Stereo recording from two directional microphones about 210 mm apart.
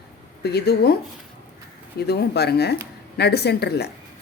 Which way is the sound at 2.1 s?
50° left (ahead or behind).